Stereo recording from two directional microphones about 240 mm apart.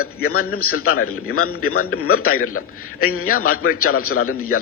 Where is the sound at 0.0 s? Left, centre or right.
Left.